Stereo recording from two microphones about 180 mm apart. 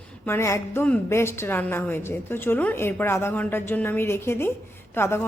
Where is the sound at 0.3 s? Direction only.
15° left (ahead or behind).